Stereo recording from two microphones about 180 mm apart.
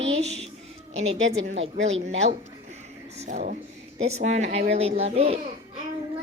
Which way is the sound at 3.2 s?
40° right (ahead or behind).